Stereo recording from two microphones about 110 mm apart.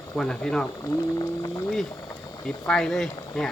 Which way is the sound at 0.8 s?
30° left (ahead or behind).